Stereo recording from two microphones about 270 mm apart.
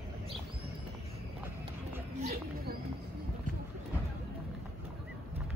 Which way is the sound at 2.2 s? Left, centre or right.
Right.